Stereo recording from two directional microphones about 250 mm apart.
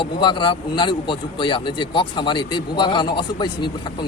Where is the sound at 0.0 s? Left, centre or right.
Centre.